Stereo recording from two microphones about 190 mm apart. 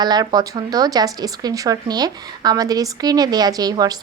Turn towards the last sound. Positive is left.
turn(degrees=-20)  # may be behind; listen again after turning